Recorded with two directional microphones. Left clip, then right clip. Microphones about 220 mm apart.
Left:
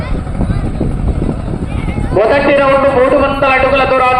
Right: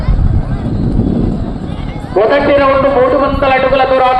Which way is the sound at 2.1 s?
45° left (ahead or behind).